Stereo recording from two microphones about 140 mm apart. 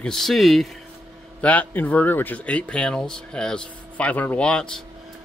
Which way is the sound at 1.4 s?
10° left (ahead or behind).